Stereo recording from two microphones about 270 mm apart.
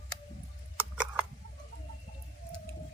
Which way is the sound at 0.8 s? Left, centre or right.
Centre.